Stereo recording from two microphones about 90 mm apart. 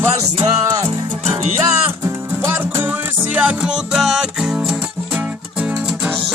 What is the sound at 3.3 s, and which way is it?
Music, 10° right (ahead or behind).